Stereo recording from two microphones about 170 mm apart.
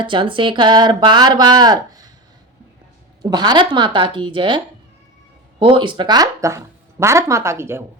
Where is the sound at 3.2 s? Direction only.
25° right (ahead or behind).